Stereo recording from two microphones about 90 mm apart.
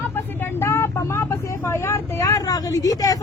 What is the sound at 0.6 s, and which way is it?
Speech, 30° left (ahead or behind).